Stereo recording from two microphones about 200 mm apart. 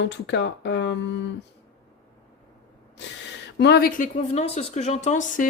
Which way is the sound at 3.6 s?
50° left (ahead or behind).